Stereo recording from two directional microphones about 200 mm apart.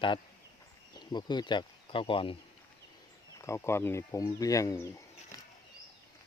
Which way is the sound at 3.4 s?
15° left (ahead or behind).